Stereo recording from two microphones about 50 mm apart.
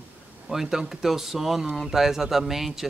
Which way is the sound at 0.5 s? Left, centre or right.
Centre.